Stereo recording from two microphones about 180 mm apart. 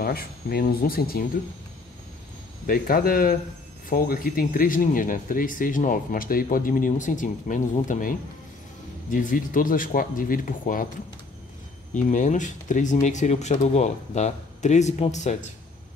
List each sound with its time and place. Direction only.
0.0 s speech: 55° left (ahead or behind)
2.6 s speech: 55° left (ahead or behind)
11.9 s speech: 45° left (ahead or behind)